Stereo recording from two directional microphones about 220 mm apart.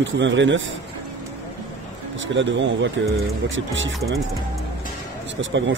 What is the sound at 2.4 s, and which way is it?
Speech, 55° right (ahead or behind).